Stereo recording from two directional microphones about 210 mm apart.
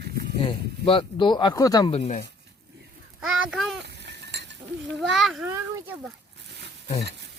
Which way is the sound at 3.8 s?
55° right (ahead or behind).